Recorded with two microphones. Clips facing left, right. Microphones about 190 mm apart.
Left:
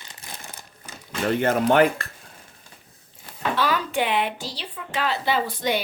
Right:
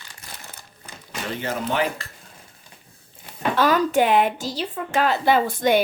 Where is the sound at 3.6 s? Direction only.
45° right (ahead or behind).